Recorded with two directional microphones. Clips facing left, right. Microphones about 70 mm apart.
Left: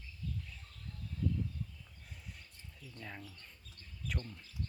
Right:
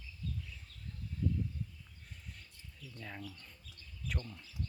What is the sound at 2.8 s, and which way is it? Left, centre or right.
Speech, left.